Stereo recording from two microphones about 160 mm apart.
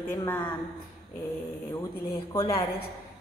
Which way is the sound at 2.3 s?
25° left (ahead or behind).